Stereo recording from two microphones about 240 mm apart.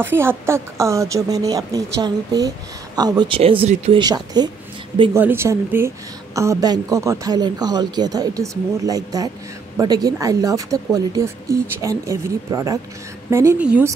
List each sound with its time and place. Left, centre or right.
0.0 s speech: centre